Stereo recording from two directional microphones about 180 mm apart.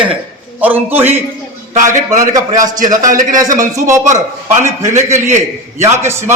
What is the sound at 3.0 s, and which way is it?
Speech, 45° right (ahead or behind).